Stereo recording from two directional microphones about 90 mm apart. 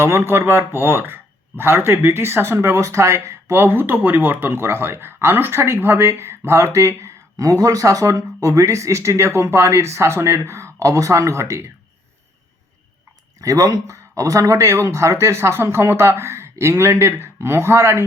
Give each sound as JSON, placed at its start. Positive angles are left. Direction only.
{"t": 0.0, "sound": "speech", "side_deg": -30}
{"t": 13.4, "sound": "speech", "side_deg": -40}